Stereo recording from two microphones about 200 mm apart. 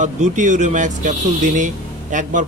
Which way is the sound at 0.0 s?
40° right (ahead or behind).